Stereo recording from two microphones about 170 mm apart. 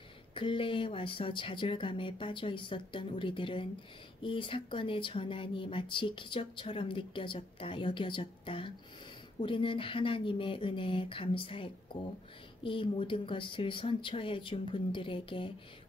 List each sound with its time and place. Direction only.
0.3 s speech: 30° left (ahead or behind)